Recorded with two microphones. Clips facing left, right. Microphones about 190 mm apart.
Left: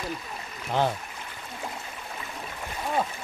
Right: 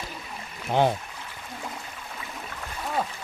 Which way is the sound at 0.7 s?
20° right (ahead or behind).